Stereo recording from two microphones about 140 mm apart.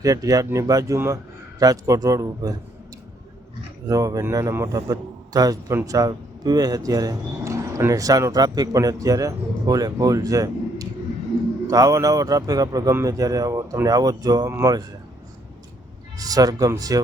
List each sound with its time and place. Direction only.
0.0 s a man's voice: 25° right (ahead or behind)
3.8 s a man's voice: 25° right (ahead or behind)
16.1 s a man's voice: 25° right (ahead or behind)